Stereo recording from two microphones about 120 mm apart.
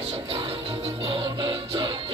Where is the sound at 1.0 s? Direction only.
50° right (ahead or behind).